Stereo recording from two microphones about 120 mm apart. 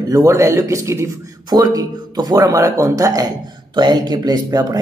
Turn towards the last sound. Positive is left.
turn(degrees=-35)  # may be behind; listen again after turning